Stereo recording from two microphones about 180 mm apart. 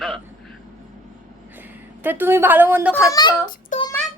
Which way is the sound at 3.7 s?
45° left (ahead or behind).